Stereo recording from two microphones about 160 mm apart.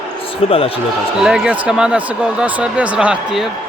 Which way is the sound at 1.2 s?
5° right (ahead or behind).